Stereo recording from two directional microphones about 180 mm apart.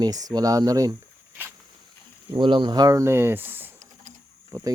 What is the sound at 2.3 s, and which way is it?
Speech, 25° right (ahead or behind).